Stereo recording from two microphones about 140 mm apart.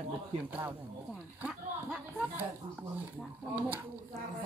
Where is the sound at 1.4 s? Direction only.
5° right (ahead or behind).